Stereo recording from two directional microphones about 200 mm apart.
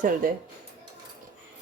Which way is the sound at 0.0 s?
45° right (ahead or behind).